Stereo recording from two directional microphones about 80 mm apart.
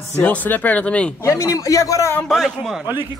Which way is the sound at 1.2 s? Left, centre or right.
Left.